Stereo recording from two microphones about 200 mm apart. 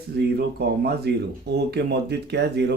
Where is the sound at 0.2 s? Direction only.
50° right (ahead or behind).